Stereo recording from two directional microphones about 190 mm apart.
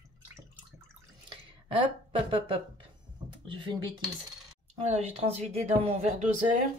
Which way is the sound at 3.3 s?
25° right (ahead or behind).